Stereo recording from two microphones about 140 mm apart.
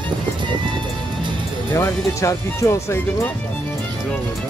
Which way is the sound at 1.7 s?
20° left (ahead or behind).